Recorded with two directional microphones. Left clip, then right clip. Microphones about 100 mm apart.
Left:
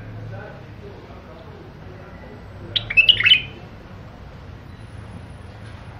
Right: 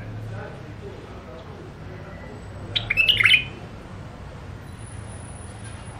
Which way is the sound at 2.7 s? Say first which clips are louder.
Left 4 dB; 15° left (ahead or behind).